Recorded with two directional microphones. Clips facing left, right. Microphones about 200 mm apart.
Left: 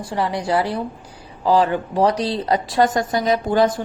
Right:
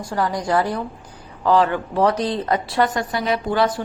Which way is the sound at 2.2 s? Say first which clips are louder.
Left 1 dB; 35° left (ahead or behind).